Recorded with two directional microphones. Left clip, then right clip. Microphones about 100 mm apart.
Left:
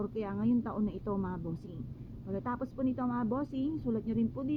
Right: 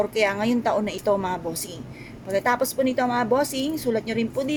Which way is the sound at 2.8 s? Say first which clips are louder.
Right 10 dB; 45° left (ahead or behind).